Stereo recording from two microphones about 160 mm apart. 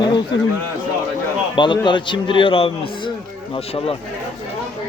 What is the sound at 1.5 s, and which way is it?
A man's voice, 30° left (ahead or behind).